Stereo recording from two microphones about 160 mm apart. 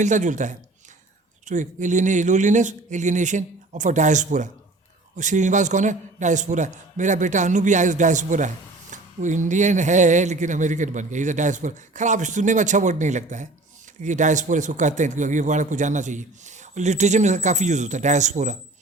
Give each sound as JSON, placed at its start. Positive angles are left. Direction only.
{"t": 0.0, "sound": "a man's voice", "side_deg": -50}